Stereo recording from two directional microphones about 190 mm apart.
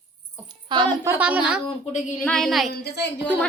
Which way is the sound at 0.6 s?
25° right (ahead or behind).